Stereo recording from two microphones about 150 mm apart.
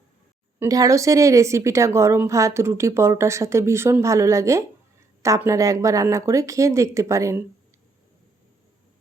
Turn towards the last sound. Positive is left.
turn(degrees=-20)  # may be behind; listen again after turning